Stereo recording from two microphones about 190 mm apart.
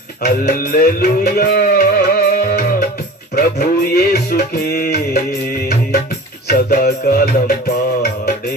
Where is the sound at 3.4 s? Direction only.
55° left (ahead or behind).